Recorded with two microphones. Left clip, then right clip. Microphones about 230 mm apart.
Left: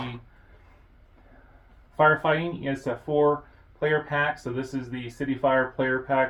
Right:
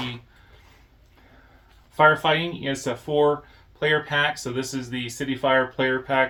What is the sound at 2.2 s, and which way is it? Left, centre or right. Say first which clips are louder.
Speech: right 3 dB; right.